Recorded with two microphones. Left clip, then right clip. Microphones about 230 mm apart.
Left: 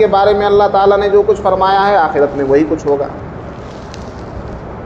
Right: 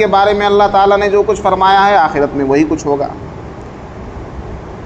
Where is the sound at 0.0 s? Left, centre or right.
Right.